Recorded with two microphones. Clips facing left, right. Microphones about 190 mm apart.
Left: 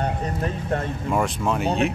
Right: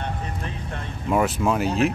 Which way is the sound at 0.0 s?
45° left (ahead or behind).